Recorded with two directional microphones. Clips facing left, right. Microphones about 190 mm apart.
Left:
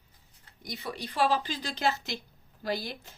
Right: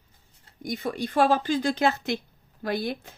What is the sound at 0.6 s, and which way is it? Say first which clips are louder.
A woman's voice: right 8 dB; 50° right (ahead or behind).